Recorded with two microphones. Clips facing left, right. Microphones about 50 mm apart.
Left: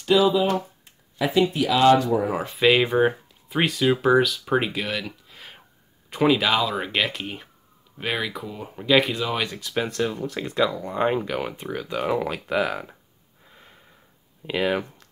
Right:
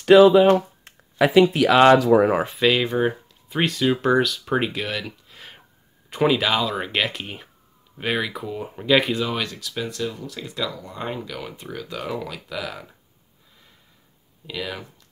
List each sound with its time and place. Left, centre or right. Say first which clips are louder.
0.0 s speech: right 7 dB; right
2.7 s speech: left 2 dB; centre
9.4 s speech: left 1 dB; left
9.8 s speech: left 3 dB; left
11.6 s speech: left 4 dB; centre
12.3 s speech: left 7 dB; left
14.4 s speech: left 8 dB; left